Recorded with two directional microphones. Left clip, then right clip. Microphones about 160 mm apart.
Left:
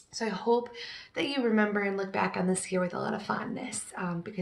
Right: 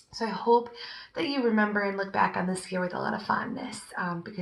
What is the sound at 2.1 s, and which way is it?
Speech, 15° left (ahead or behind).